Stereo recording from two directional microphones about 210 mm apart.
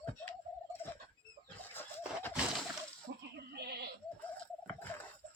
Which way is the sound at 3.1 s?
45° right (ahead or behind).